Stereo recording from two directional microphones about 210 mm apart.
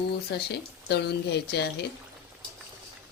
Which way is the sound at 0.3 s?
50° left (ahead or behind).